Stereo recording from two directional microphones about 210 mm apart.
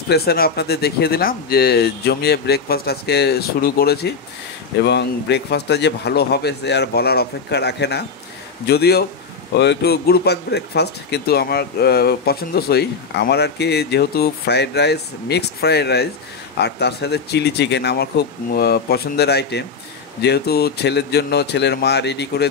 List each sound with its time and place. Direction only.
0.1 s speech: 50° left (ahead or behind)